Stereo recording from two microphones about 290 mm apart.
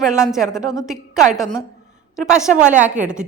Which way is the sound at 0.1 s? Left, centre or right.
Centre.